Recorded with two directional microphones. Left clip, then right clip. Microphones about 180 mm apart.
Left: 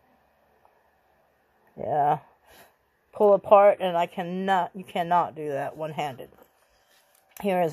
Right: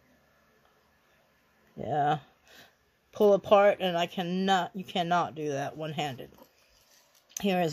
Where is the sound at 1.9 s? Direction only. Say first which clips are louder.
Left 4 dB; 15° right (ahead or behind).